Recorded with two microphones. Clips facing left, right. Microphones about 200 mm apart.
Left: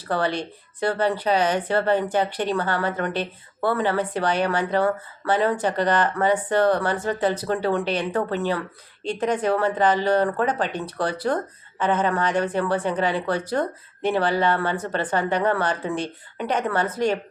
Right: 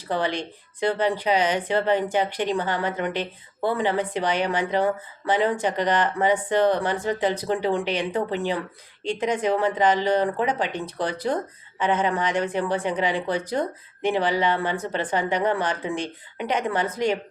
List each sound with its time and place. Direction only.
0.1 s a woman's voice: 15° right (ahead or behind)